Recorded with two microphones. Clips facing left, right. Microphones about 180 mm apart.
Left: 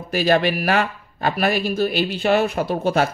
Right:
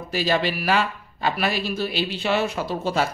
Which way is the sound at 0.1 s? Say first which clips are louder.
Left 5 dB; 55° left (ahead or behind).